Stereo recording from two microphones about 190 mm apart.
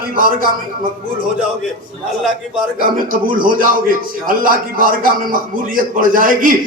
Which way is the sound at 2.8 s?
50° right (ahead or behind).